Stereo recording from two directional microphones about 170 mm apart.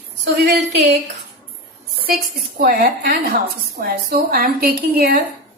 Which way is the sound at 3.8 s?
60° right (ahead or behind).